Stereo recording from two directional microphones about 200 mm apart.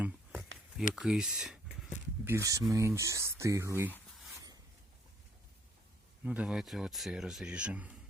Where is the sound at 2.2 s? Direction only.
15° right (ahead or behind).